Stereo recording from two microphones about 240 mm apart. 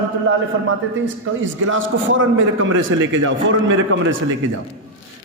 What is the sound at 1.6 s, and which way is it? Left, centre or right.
A man's voice, right.